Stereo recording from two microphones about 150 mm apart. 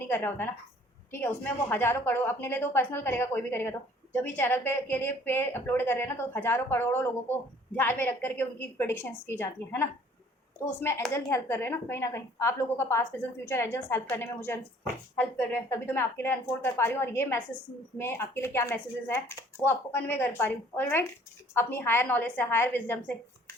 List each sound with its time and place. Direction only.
0.0 s a woman's voice: 15° left (ahead or behind)
1.7 s a woman's voice: 15° left (ahead or behind)